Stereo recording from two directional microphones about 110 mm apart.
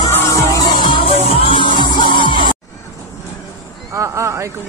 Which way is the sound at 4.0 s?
25° right (ahead or behind).